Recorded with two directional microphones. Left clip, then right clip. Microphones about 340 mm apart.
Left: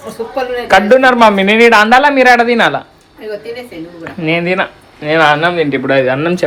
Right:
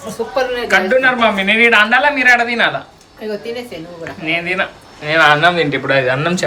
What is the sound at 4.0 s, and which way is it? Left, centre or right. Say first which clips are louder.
Speech: left 4 dB; centre.